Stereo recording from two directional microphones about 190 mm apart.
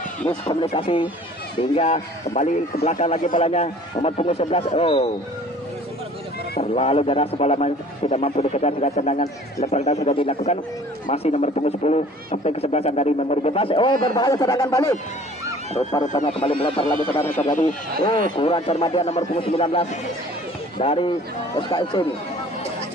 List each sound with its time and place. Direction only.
0.5 s a man's voice: 25° left (ahead or behind)
6.6 s a man's voice: 30° left (ahead or behind)
16.0 s speech: 40° left (ahead or behind)
18.3 s a man's voice: 30° left (ahead or behind)